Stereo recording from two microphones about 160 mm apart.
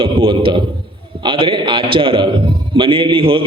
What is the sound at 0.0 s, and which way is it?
A man's voice, 35° right (ahead or behind).